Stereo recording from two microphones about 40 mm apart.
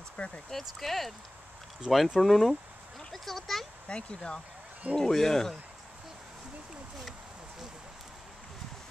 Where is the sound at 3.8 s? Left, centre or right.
Left.